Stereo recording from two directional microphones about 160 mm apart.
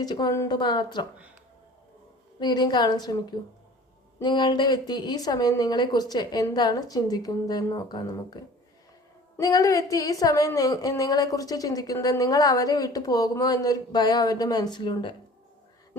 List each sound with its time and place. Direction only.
0.0 s a woman's voice: 25° left (ahead or behind)
2.4 s a woman's voice: 25° left (ahead or behind)
9.4 s a woman's voice: 20° left (ahead or behind)